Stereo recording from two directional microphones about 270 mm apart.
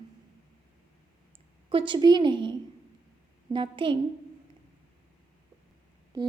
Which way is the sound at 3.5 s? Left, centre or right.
Centre.